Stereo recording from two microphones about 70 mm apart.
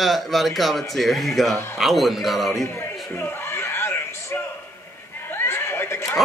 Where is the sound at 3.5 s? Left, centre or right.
Left.